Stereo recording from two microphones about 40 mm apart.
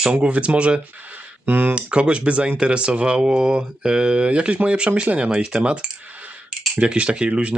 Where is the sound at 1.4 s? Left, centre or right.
Right.